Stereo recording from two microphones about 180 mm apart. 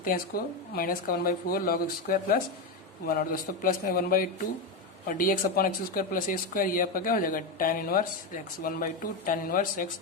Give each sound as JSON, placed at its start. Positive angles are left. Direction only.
{"t": 0.7, "sound": "speech", "side_deg": 50}